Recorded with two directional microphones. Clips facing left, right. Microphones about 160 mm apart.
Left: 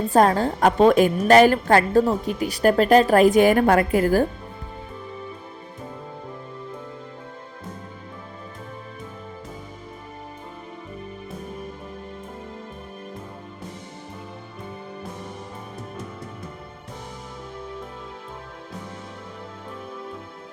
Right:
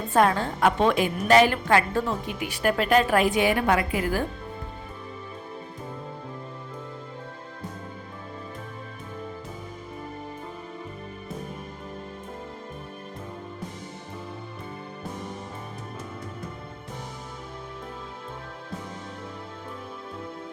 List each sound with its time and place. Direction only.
0.1 s a woman's voice: 40° left (ahead or behind)